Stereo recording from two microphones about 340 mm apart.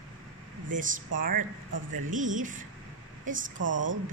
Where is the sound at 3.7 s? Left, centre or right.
Right.